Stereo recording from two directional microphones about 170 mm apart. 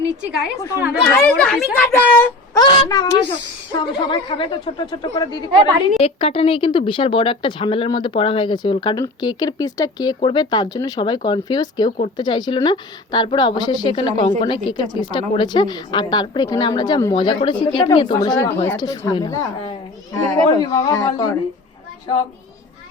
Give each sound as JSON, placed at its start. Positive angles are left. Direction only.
{"t": 0.3, "sound": "speech", "side_deg": -5}
{"t": 2.6, "sound": "a woman's voice", "side_deg": 25}
{"t": 6.0, "sound": "a woman's voice", "side_deg": 35}
{"t": 11.9, "sound": "speech", "side_deg": 45}
{"t": 12.1, "sound": "a woman's voice", "side_deg": 25}